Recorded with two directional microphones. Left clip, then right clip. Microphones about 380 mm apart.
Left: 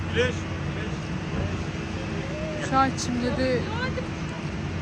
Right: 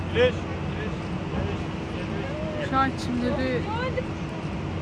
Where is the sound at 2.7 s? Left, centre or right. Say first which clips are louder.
Left 2 dB; centre.